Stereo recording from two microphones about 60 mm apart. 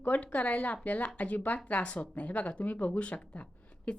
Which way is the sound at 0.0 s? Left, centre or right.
Left.